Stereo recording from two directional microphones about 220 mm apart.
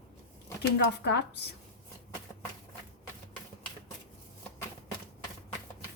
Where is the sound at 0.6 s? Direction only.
50° left (ahead or behind).